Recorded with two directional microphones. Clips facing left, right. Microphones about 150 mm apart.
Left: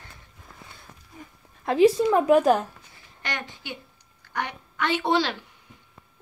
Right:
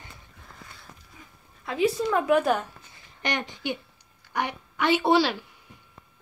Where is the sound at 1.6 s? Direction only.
45° left (ahead or behind).